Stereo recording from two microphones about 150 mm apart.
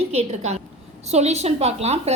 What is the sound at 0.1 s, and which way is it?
A woman's voice, 45° right (ahead or behind).